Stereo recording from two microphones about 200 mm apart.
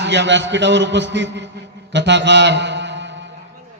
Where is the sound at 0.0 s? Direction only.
60° right (ahead or behind).